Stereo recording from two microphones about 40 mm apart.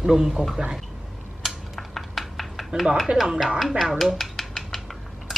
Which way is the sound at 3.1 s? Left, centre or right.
Right.